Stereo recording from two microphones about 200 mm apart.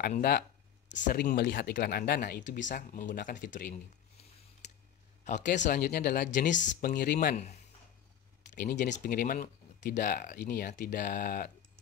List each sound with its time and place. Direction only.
0.0 s a sound: 50° left (ahead or behind)
1.0 s speech: 45° left (ahead or behind)
5.2 s speech: 40° left (ahead or behind)
8.5 s speech: 40° left (ahead or behind)